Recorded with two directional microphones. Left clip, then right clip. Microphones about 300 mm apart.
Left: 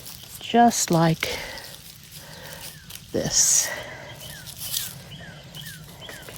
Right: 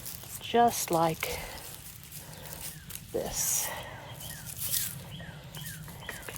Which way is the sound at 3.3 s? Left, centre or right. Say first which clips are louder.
Left 12 dB; left.